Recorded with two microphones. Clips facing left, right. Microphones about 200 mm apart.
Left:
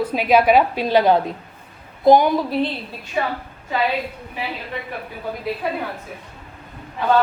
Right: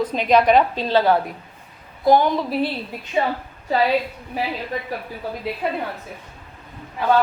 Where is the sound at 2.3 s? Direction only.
5° right (ahead or behind).